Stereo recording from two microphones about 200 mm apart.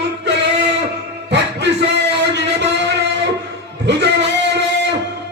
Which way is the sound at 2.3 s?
60° right (ahead or behind).